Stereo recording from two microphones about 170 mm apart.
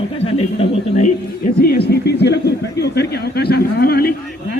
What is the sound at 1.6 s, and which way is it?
A man's voice, 65° left (ahead or behind).